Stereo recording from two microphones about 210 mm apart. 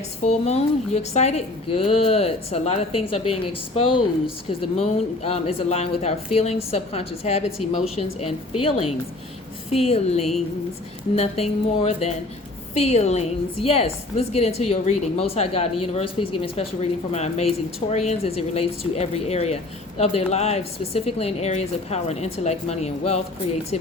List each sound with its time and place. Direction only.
0.2 s a woman's voice: 30° left (ahead or behind)